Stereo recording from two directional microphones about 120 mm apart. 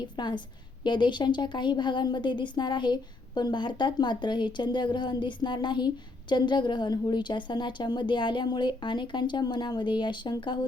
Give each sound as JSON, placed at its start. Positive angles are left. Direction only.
{"t": 0.2, "sound": "a woman's voice", "side_deg": 40}